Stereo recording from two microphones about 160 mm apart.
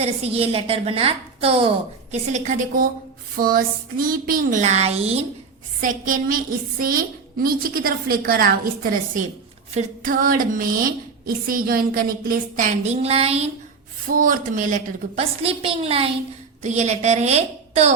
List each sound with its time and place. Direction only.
0.0 s a woman's voice: 40° right (ahead or behind)
2.3 s a woman's voice: 50° right (ahead or behind)
5.8 s a woman's voice: 60° right (ahead or behind); by 13.5 s 40° right (ahead or behind)
14.1 s a woman's voice: 60° right (ahead or behind)
15.2 s a woman's voice: 35° right (ahead or behind)